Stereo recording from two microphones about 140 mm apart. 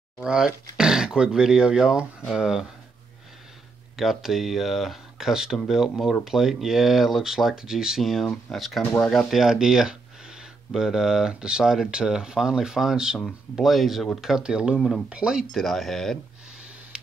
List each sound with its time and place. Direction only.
0.2 s speech: 5° right (ahead or behind)
3.9 s speech: centre (ahead or behind)
16.9 s a sound: 5° right (ahead or behind)